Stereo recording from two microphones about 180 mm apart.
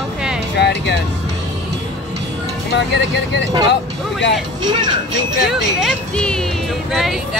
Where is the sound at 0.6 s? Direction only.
70° left (ahead or behind).